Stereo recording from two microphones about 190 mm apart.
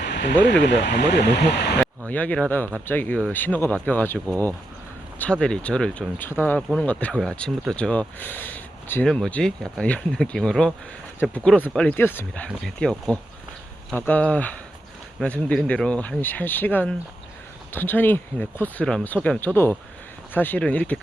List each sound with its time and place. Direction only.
0.0 s speech: 65° left (ahead or behind)
1.8 s speech: 10° left (ahead or behind)